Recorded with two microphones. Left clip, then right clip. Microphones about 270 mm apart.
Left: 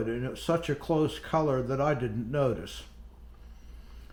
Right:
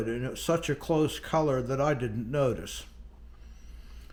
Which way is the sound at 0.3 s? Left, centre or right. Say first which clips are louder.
Right 1 dB; centre.